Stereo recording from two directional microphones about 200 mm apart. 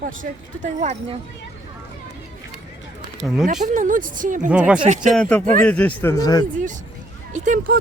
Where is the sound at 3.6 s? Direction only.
40° right (ahead or behind).